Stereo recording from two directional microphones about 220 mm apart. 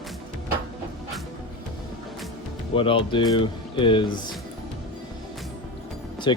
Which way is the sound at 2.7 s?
25° left (ahead or behind).